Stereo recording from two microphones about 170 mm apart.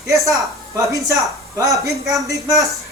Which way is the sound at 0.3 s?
20° right (ahead or behind).